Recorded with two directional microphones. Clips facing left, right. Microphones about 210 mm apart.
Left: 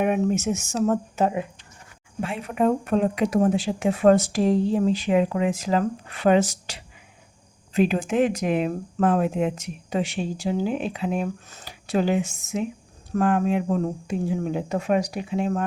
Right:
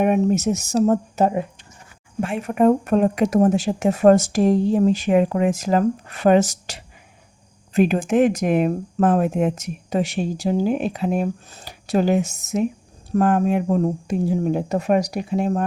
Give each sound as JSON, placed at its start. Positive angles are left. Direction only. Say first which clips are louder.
{"t": 0.0, "sound": "speech", "louder": "right 4 dB", "side_deg": -40}